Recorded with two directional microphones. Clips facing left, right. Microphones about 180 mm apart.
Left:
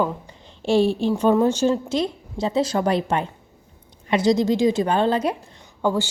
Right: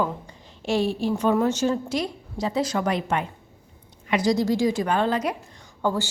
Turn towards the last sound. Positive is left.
turn(degrees=15)  # may be behind; listen again after turning